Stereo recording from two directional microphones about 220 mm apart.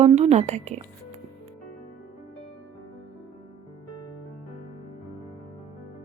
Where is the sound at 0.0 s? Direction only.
30° right (ahead or behind).